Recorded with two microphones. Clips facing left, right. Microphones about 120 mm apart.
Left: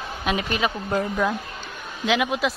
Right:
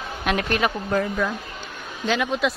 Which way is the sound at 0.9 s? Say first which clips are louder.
Even; 15° left (ahead or behind).